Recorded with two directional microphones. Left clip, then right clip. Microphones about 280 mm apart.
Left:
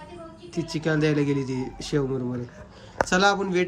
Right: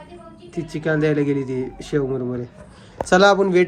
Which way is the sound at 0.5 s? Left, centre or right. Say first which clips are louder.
Right 4 dB; centre.